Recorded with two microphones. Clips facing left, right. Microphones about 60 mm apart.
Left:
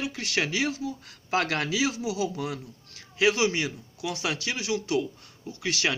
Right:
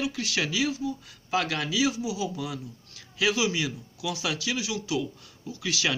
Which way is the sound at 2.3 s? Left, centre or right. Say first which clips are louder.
Left 1 dB; left.